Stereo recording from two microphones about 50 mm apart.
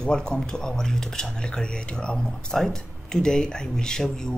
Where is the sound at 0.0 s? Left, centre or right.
Centre.